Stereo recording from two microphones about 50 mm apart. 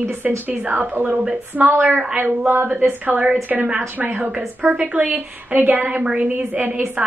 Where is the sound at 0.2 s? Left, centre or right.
Right.